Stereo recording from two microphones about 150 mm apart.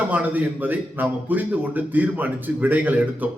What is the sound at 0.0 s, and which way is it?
A man's voice, 10° right (ahead or behind).